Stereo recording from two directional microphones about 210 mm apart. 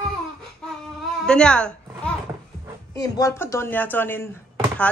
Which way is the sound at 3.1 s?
15° left (ahead or behind).